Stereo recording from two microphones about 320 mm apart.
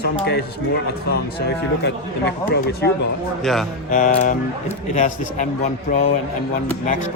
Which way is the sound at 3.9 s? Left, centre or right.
Left.